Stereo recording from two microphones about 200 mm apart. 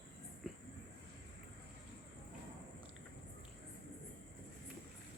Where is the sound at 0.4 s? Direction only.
Centre (ahead or behind).